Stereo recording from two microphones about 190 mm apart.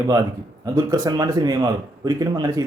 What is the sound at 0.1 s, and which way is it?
Speech, 20° right (ahead or behind).